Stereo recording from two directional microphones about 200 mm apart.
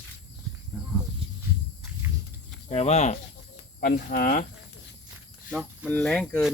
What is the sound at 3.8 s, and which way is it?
Speech, 50° left (ahead or behind).